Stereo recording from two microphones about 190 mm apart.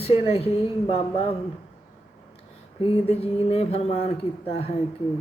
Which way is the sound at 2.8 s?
30° left (ahead or behind).